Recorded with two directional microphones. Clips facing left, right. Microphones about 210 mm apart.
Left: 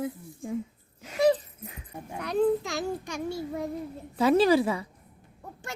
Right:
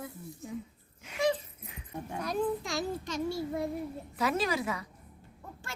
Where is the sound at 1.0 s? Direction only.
35° left (ahead or behind).